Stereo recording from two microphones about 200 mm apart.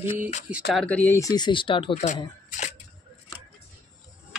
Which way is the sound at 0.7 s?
5° left (ahead or behind).